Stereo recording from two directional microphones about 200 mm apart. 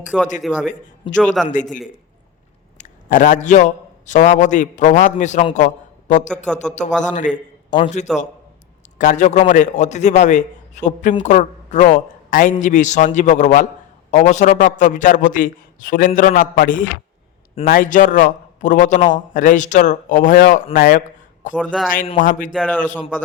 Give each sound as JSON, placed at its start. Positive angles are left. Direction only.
{"t": 0.4, "sound": "a man's voice", "side_deg": 5}
{"t": 2.7, "sound": "a man's voice", "side_deg": 40}
{"t": 8.1, "sound": "a man's voice", "side_deg": 0}
{"t": 9.0, "sound": "a man's voice", "side_deg": 40}
{"t": 21.6, "sound": "a man's voice", "side_deg": 5}
{"t": 22.2, "sound": "a man's voice", "side_deg": 40}
{"t": 22.5, "sound": "a man's voice", "side_deg": 5}